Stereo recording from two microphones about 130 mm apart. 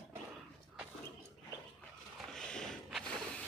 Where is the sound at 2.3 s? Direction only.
5° left (ahead or behind).